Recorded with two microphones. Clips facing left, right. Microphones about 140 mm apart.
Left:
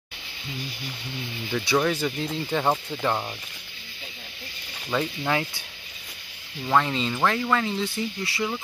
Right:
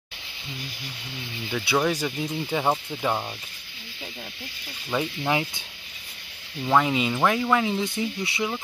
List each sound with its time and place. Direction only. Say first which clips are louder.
1.5 s speech: left 1 dB; 5° right (ahead or behind)
4.9 s speech: even; 15° right (ahead or behind)
6.6 s speech: right 2 dB; 10° right (ahead or behind)